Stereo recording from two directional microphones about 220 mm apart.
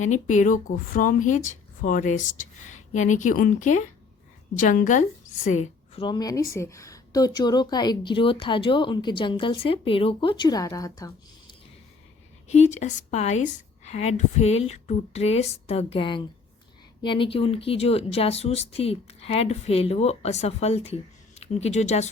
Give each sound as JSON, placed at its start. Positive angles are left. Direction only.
{"t": 0.0, "sound": "a woman's voice", "side_deg": 35}
{"t": 12.5, "sound": "a woman's voice", "side_deg": 30}